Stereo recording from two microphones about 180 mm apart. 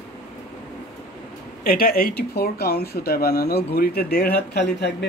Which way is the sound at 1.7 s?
60° left (ahead or behind).